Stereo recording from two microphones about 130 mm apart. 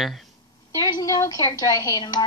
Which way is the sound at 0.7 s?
25° left (ahead or behind).